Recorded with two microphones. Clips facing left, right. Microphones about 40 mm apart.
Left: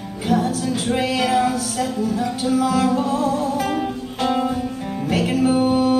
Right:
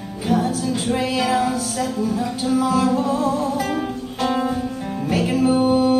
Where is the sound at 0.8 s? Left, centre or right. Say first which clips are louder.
Left 1 dB; left.